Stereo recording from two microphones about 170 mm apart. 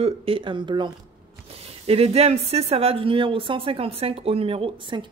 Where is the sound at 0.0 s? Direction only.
35° right (ahead or behind).